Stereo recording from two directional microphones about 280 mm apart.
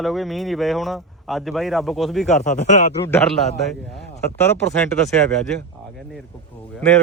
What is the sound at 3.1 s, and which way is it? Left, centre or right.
A man's voice, centre.